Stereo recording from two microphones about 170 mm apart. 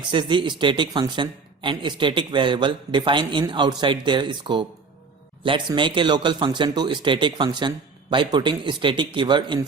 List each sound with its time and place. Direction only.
0.1 s speech: 30° right (ahead or behind)